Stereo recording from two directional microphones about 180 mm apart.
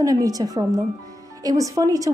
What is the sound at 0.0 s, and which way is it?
A woman's voice, 20° right (ahead or behind).